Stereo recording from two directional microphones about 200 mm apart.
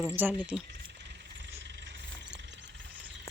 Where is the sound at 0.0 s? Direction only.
5° right (ahead or behind).